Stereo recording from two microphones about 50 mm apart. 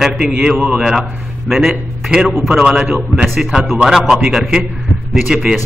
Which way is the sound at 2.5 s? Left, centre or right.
Centre.